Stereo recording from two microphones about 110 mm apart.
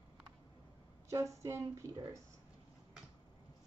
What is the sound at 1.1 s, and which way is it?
Speech, 25° right (ahead or behind).